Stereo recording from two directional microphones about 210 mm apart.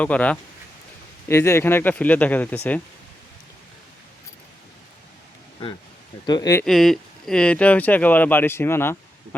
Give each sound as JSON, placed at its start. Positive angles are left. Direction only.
{"t": 0.0, "sound": "speech", "side_deg": 5}
{"t": 6.2, "sound": "speech", "side_deg": 20}
{"t": 6.7, "sound": "speech", "side_deg": 0}